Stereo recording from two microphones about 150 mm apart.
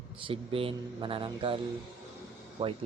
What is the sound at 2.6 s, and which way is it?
Speech, 30° right (ahead or behind).